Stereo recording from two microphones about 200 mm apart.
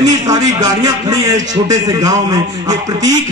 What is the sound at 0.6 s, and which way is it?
A man's voice, 15° right (ahead or behind).